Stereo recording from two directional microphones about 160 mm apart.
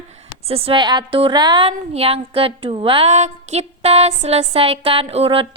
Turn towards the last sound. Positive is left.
turn(degrees=-35)  # may be behind; listen again after turning